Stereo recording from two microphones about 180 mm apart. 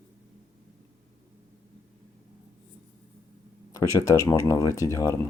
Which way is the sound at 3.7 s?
15° left (ahead or behind).